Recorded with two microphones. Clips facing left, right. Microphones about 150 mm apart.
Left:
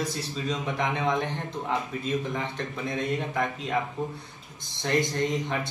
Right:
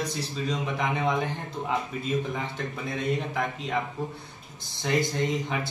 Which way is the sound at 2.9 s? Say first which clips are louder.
Even; centre (ahead or behind).